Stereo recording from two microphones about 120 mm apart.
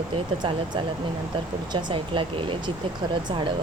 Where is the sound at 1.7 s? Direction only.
45° right (ahead or behind).